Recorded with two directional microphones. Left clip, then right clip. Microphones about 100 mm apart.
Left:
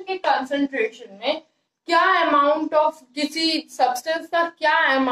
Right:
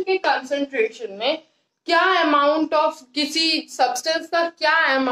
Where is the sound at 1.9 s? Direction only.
55° right (ahead or behind).